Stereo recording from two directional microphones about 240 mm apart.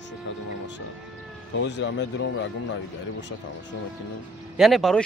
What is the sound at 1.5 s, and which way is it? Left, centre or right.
Speech, left.